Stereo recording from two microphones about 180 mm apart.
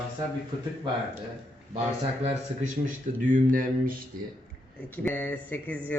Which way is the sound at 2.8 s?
45° right (ahead or behind).